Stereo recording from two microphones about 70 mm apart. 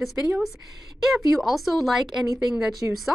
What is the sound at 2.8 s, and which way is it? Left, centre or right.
Speech, right.